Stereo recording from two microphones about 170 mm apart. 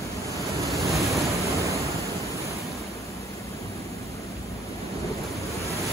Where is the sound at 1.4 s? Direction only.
20° right (ahead or behind).